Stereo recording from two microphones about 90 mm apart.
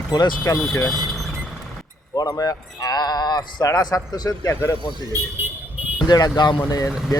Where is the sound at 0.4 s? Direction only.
35° left (ahead or behind).